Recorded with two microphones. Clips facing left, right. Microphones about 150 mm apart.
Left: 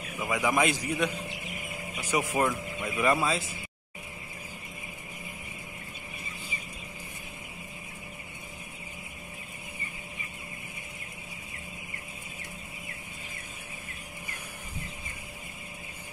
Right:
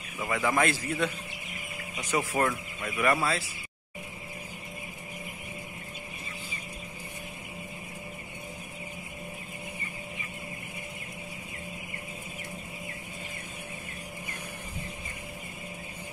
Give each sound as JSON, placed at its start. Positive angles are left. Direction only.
{"t": 0.2, "sound": "speech", "side_deg": 15}